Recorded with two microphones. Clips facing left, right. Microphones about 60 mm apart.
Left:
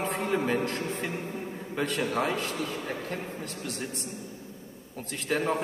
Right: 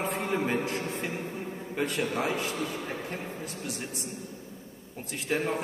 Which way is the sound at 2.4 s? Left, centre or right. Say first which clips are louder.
Even; centre.